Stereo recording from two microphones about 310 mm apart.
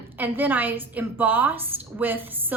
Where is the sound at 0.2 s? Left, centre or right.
Centre.